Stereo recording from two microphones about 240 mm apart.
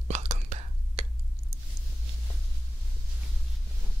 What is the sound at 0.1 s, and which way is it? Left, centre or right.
Whispering, right.